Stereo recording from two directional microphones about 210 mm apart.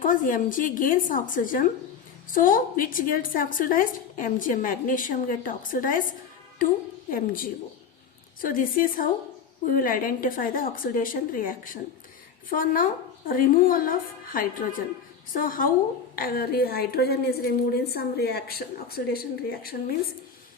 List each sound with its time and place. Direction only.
0.0 s a woman's voice: 40° left (ahead or behind)
7.1 s a woman's voice: 40° left (ahead or behind)